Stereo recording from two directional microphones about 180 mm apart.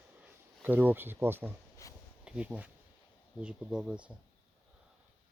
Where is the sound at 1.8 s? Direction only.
20° left (ahead or behind).